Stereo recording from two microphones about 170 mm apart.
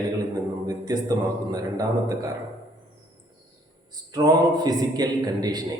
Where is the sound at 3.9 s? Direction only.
20° right (ahead or behind).